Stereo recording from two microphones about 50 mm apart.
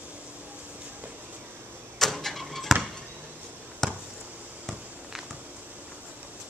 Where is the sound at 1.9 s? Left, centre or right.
Centre.